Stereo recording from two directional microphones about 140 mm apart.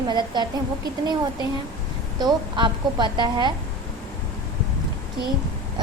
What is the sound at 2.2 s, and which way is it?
A woman's voice, 30° right (ahead or behind).